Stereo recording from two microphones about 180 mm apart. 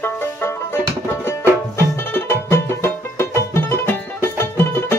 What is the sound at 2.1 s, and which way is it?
Music, 15° left (ahead or behind).